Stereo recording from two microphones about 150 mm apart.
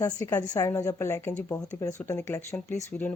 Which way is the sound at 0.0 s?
25° left (ahead or behind).